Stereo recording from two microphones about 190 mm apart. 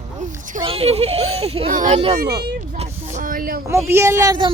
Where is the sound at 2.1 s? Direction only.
55° right (ahead or behind).